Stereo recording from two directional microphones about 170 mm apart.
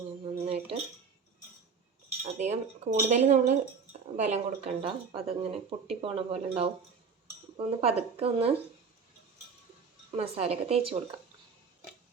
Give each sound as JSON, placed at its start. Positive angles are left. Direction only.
{"t": 0.4, "sound": "cutlery", "side_deg": -35}
{"t": 2.2, "sound": "speech", "side_deg": -40}
{"t": 10.2, "sound": "speech", "side_deg": -35}